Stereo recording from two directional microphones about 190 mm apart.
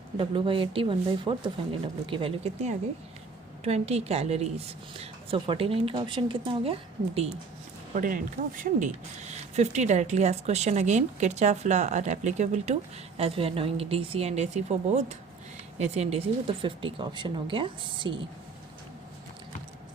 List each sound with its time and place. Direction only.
0.2 s a woman's voice: 30° right (ahead or behind)
7.9 s a woman's voice: 45° right (ahead or behind); by 18.2 s 25° right (ahead or behind)